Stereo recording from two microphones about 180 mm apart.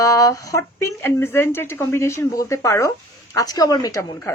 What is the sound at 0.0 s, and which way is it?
A woman's voice, 20° left (ahead or behind).